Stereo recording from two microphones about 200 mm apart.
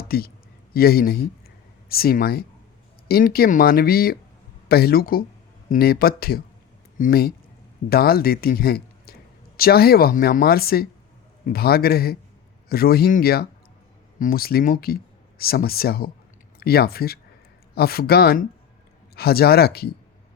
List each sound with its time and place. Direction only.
0.1 s speech: 50° left (ahead or behind)